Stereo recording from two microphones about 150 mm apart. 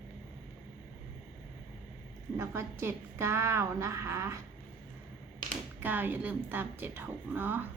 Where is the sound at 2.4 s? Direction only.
15° right (ahead or behind).